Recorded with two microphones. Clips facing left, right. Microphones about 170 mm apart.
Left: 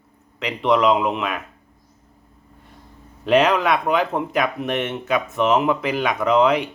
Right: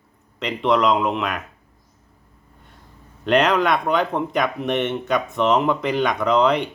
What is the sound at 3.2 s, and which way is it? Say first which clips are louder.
Speech: left 1 dB; centre (ahead or behind).